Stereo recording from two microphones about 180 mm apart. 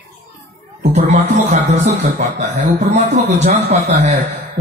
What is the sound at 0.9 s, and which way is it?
Speech, 45° right (ahead or behind).